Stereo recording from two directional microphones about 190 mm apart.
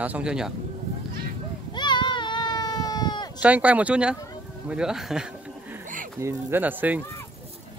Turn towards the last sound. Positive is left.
turn(degrees=-10)  # may be behind; listen again after turning